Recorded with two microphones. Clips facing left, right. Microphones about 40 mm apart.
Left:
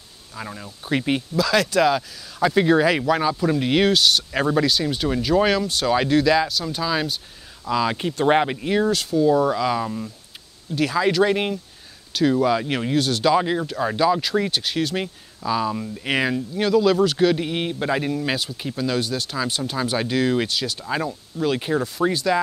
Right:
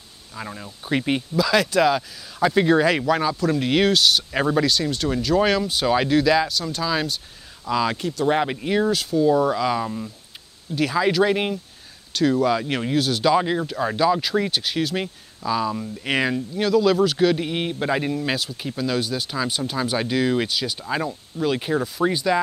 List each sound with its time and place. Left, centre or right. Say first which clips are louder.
0.3 s speech: even; centre
8.0 s speech: left 2 dB; left
8.5 s speech: even; centre